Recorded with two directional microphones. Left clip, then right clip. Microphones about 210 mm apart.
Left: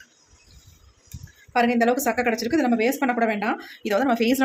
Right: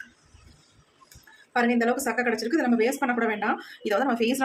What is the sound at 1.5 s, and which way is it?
A woman's voice, 25° left (ahead or behind).